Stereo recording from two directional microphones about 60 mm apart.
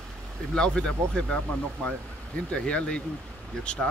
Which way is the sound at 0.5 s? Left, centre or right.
Centre.